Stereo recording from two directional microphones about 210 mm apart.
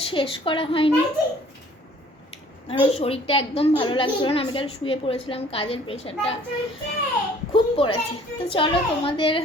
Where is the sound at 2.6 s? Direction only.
25° left (ahead or behind).